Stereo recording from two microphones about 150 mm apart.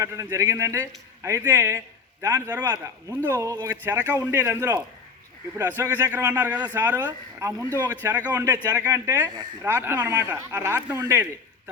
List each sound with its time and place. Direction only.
0.0 s a man's voice: 20° right (ahead or behind)